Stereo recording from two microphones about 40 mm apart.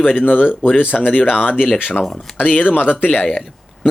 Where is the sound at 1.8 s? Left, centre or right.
Left.